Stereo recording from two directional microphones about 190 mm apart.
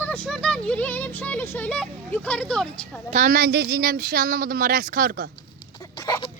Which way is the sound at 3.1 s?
40° right (ahead or behind).